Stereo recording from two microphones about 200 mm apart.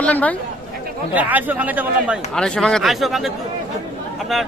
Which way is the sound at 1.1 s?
10° right (ahead or behind).